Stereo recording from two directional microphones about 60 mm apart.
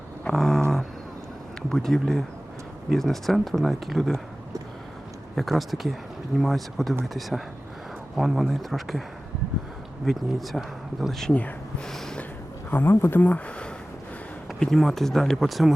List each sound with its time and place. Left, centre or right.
0.3 s a sound: centre
1.7 s speech: centre
5.3 s speech: centre
10.1 s speech: centre
11.9 s a sound: centre
12.7 s speech: left
13.1 s speech: left
14.6 s speech: centre